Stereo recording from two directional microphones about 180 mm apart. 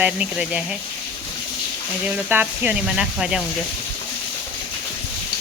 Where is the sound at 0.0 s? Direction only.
5° right (ahead or behind).